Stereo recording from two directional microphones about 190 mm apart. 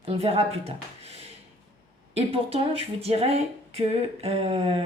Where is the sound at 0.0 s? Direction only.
30° right (ahead or behind).